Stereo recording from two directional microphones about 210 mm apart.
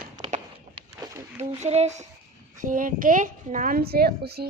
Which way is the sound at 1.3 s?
30° right (ahead or behind).